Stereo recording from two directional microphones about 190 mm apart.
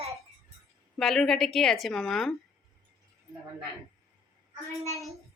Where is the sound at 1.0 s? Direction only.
Centre (ahead or behind).